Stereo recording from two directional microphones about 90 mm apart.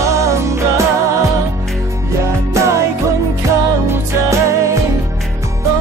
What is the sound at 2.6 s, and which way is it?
Music, 35° right (ahead or behind).